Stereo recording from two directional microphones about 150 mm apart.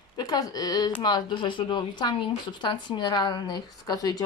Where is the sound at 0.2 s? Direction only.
25° left (ahead or behind).